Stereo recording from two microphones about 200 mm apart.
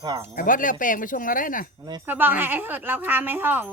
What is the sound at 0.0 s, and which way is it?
Wind chime, 20° right (ahead or behind).